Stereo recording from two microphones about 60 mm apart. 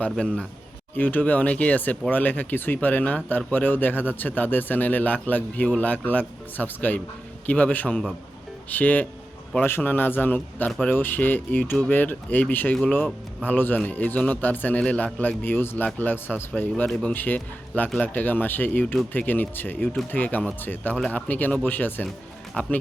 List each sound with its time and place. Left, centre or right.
0.9 s speech: left
15.4 s speech: left